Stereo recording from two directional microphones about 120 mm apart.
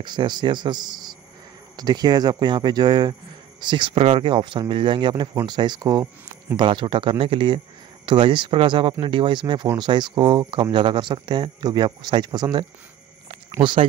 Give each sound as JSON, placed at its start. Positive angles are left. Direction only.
{"t": 0.0, "sound": "speech", "side_deg": -40}